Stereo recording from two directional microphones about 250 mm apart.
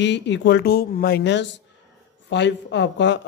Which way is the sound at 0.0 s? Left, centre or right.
Left.